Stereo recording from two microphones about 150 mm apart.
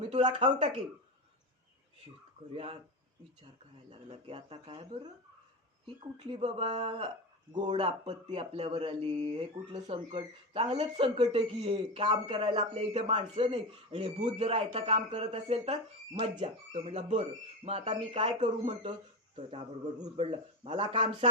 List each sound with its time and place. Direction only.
0.1 s a man's voice: 35° right (ahead or behind)
2.5 s a man's voice: 40° right (ahead or behind)
4.1 s speech: 40° right (ahead or behind)
5.8 s a man's voice: 35° right (ahead or behind)
12.9 s a man's voice: 40° right (ahead or behind)